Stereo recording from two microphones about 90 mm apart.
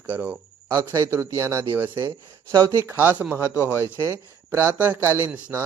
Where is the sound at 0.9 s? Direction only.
35° right (ahead or behind).